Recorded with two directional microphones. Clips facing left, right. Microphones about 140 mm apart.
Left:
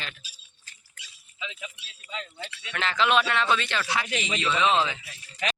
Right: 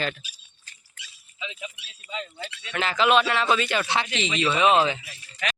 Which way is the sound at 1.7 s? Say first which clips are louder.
Right 3 dB; 10° right (ahead or behind).